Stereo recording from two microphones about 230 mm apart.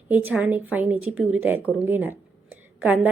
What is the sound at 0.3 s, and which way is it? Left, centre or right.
A woman's voice, centre.